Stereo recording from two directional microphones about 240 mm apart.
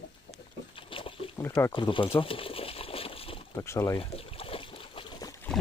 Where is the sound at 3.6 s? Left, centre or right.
Centre.